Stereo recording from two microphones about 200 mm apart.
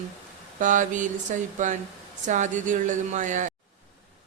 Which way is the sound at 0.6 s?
40° right (ahead or behind).